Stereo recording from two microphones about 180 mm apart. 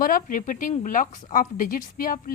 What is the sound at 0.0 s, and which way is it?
Speech, 50° left (ahead or behind).